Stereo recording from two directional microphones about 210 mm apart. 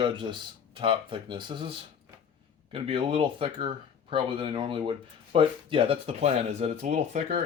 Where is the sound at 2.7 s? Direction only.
25° right (ahead or behind).